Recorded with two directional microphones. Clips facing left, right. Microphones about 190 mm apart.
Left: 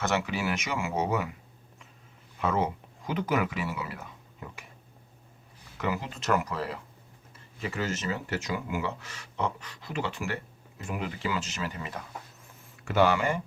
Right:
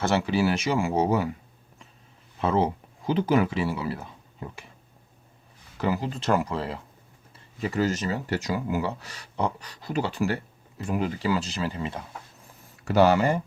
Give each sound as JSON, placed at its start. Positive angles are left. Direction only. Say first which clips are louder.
{"t": 0.0, "sound": "speech", "louder": "right 6 dB", "side_deg": -30}
{"t": 2.4, "sound": "speech", "louder": "right 4 dB", "side_deg": -30}
{"t": 5.7, "sound": "speech", "louder": "right 5 dB", "side_deg": -35}